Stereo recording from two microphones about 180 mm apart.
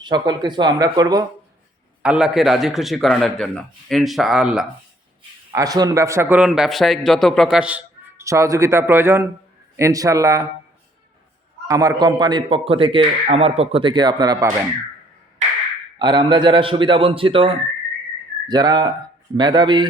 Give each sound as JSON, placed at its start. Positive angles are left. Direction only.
{"t": 0.0, "sound": "speech", "side_deg": -25}
{"t": 2.0, "sound": "a man's voice", "side_deg": -5}
{"t": 5.5, "sound": "a man's voice", "side_deg": -20}
{"t": 11.7, "sound": "speech", "side_deg": -20}
{"t": 16.0, "sound": "speech", "side_deg": -25}